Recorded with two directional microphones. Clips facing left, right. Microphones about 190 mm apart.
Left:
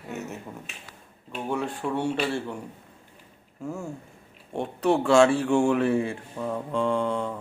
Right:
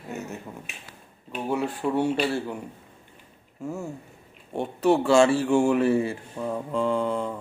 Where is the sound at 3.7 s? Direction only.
Centre (ahead or behind).